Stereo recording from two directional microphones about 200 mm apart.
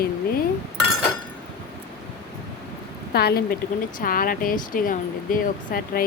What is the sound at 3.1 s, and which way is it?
Speech, 50° left (ahead or behind).